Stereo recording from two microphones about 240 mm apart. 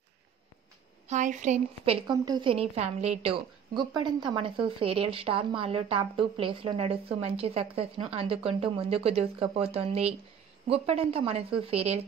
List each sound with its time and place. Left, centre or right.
1.0 s a woman's voice: right
2.0 s a woman's voice: centre